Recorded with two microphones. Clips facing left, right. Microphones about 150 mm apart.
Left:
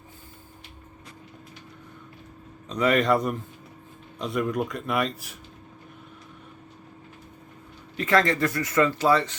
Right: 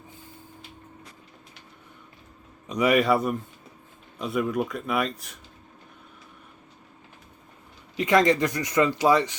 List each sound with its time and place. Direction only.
2.6 s speech: 10° right (ahead or behind)
7.9 s speech: 15° right (ahead or behind)